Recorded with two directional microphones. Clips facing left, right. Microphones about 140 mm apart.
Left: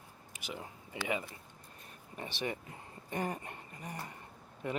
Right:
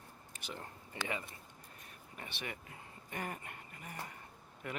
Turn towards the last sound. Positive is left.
turn(degrees=25)  # may be behind; listen again after turning